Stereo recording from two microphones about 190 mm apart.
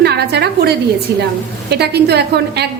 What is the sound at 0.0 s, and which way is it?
Speech, 60° right (ahead or behind).